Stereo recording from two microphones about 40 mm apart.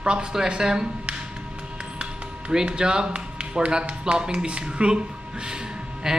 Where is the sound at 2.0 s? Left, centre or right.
Right.